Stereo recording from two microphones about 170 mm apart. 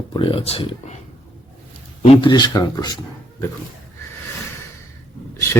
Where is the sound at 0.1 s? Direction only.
30° left (ahead or behind).